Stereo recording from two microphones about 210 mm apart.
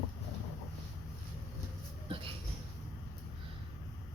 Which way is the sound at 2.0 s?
25° right (ahead or behind).